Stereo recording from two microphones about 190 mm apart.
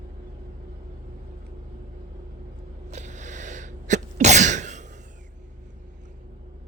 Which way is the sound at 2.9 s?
40° right (ahead or behind).